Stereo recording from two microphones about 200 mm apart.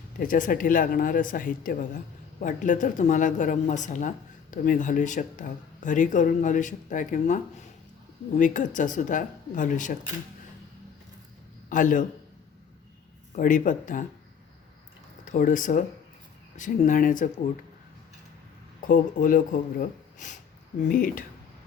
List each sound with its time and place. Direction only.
0.2 s speech: 45° left (ahead or behind)
8.4 s speech: 40° left (ahead or behind)
11.7 s speech: 40° left (ahead or behind)
13.3 s speech: 40° left (ahead or behind)
15.2 s speech: 40° left (ahead or behind)
18.9 s speech: 40° left (ahead or behind)